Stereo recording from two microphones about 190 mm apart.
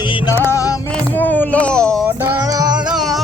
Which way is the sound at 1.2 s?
10° left (ahead or behind).